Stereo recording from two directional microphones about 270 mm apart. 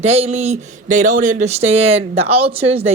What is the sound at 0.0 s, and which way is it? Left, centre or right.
Speech, right.